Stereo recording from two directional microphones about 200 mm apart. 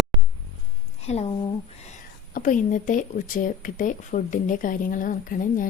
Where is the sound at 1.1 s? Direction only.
35° left (ahead or behind).